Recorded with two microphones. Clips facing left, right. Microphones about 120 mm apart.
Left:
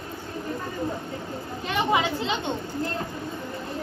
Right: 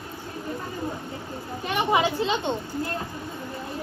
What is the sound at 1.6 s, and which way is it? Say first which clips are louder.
Speech: right 1 dB; 15° right (ahead or behind).